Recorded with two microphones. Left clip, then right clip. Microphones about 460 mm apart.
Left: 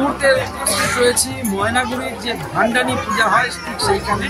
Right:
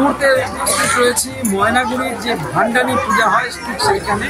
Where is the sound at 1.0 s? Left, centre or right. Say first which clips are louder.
Right 1 dB; left.